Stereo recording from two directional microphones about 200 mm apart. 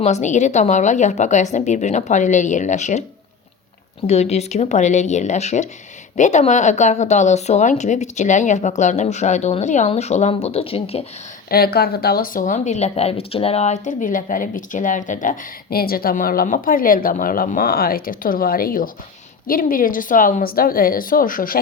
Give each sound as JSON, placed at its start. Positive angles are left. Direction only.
{"t": 0.0, "sound": "a woman's voice", "side_deg": 35}
{"t": 4.0, "sound": "a woman's voice", "side_deg": 30}
{"t": 11.4, "sound": "speech", "side_deg": 50}